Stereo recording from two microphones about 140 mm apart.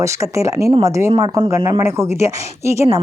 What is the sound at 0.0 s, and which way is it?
A woman's voice, 20° right (ahead or behind).